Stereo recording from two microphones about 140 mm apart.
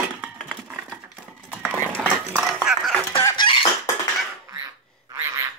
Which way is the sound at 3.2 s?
25° left (ahead or behind).